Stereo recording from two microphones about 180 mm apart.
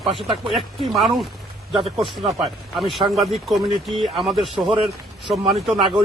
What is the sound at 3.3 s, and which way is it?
Speech, centre (ahead or behind).